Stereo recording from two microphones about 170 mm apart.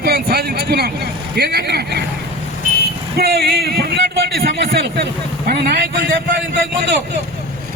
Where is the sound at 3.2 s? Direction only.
70° right (ahead or behind).